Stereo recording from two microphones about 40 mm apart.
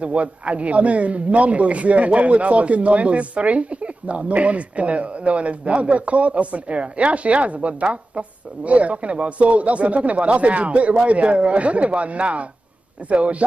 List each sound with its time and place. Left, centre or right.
0.0 s a man's voice: right